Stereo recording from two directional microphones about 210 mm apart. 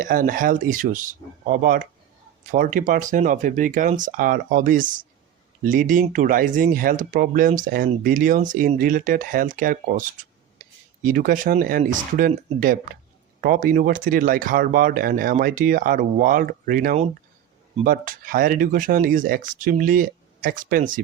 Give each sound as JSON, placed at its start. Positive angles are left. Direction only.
{"t": 0.0, "sound": "speech", "side_deg": -40}
{"t": 11.0, "sound": "speech", "side_deg": -40}